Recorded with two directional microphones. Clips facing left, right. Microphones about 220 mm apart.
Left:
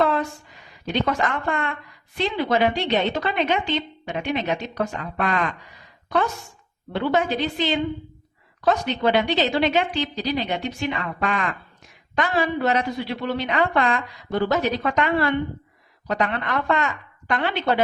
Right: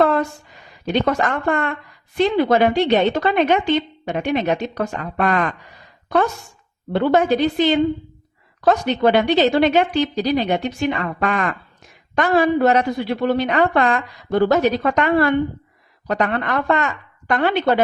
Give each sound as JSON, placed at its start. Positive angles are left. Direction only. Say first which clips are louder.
{"t": 0.0, "sound": "a sound", "louder": "right 4 dB", "side_deg": -50}
{"t": 1.0, "sound": "a woman's voice", "louder": "right 3 dB", "side_deg": -50}
{"t": 6.9, "sound": "a woman's voice", "louder": "right 6 dB", "side_deg": -50}